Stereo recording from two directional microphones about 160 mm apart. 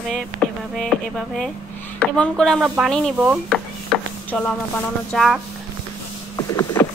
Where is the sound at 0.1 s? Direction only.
Centre (ahead or behind).